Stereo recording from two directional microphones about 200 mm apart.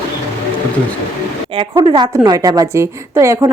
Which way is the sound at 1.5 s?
25° right (ahead or behind).